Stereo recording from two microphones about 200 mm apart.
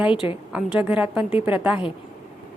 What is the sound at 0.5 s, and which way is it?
A woman's voice, 5° right (ahead or behind).